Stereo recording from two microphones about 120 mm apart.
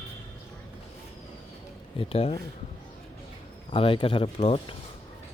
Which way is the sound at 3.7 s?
45° left (ahead or behind).